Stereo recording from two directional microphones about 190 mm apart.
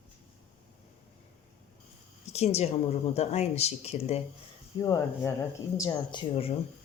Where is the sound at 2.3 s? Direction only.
35° left (ahead or behind).